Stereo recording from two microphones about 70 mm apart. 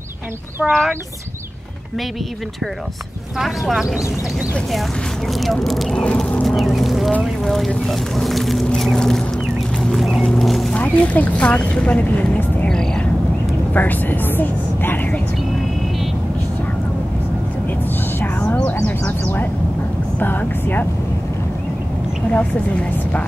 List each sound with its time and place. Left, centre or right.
0.6 s speech: centre
3.3 s speech: centre
5.3 s speech: centre
5.9 s a sound: centre
6.4 s speech: centre
9.8 s vehicle: centre
10.7 s speech: left
12.6 s a sound: centre
13.7 s speech: left
18.5 s a sound: left
18.9 s speech: left
22.3 s speech: centre